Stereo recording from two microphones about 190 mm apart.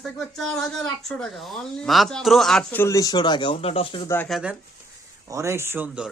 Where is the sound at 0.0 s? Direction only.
Centre (ahead or behind).